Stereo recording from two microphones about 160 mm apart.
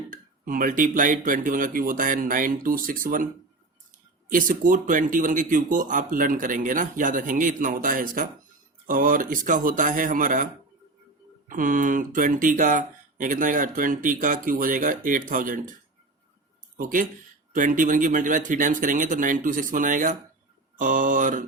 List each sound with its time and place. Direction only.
0.1 s speech: 60° right (ahead or behind)
4.3 s speech: 60° right (ahead or behind)
16.7 s speech: 60° right (ahead or behind)
20.7 s mantra: 55° right (ahead or behind)